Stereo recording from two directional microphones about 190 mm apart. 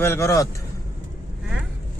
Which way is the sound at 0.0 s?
15° left (ahead or behind).